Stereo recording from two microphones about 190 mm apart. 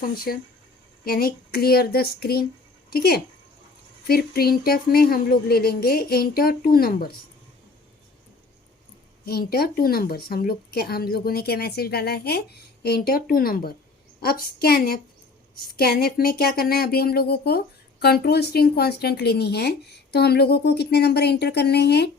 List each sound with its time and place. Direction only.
0.1 s speech: 50° left (ahead or behind)
9.2 s speech: 55° left (ahead or behind)